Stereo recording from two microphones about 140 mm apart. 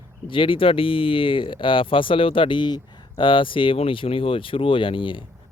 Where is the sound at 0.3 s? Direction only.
40° left (ahead or behind).